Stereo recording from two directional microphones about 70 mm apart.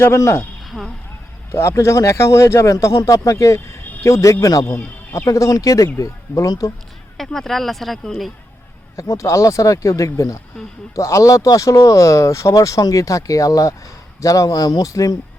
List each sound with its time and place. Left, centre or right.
0.0 s speech: left
0.6 s a sound: centre
1.5 s a man's voice: left
7.3 s speech: centre
9.0 s a man's voice: left